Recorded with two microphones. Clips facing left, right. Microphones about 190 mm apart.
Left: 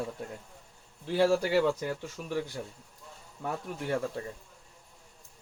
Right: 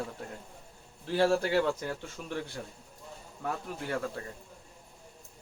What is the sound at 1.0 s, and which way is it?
Speech, 15° left (ahead or behind).